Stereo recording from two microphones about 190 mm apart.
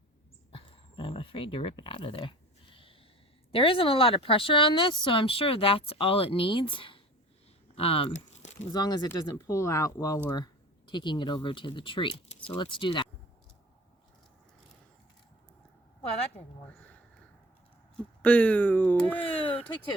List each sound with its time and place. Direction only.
0.5 s speech: 25° left (ahead or behind)
3.5 s speech: 30° left (ahead or behind)
8.7 s speech: 20° left (ahead or behind)
17.9 s speech: 5° left (ahead or behind)